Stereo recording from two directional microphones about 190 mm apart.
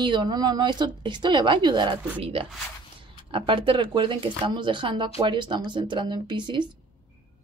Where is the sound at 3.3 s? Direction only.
30° right (ahead or behind).